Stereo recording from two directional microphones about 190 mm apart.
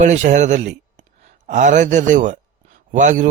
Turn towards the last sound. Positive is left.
turn(degrees=-40)  # may be behind; listen again after turning